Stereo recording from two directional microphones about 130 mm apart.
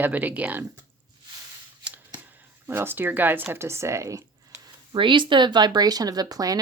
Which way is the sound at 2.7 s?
15° right (ahead or behind).